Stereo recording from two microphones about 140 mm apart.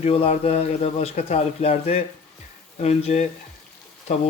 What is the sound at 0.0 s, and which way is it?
Speech, 45° left (ahead or behind).